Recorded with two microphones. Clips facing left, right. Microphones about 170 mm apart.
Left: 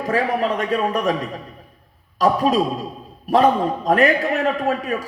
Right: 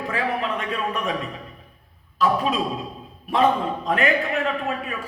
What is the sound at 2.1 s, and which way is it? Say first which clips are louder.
Speech: left 4 dB; 40° left (ahead or behind).